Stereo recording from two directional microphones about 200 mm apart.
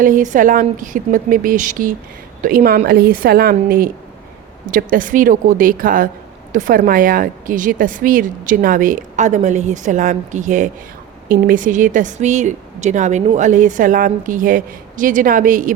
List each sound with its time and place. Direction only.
0.0 s a woman's voice: 40° right (ahead or behind)